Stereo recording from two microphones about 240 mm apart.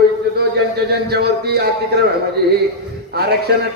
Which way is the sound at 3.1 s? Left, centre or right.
Right.